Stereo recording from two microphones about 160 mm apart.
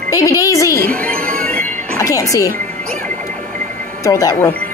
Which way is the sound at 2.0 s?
20° left (ahead or behind).